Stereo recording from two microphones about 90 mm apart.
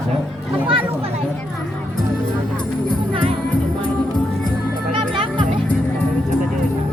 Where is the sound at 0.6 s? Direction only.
90° right.